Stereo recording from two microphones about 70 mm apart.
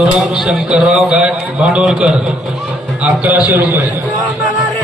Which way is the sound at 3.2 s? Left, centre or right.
Right.